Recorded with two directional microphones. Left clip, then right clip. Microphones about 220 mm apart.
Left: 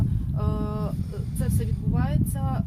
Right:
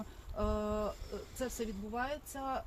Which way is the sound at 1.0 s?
Centre (ahead or behind).